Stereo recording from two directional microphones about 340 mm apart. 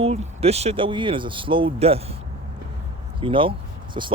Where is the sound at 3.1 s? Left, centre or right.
Centre.